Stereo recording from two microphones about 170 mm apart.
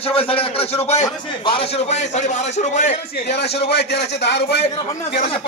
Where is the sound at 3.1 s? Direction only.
80° left.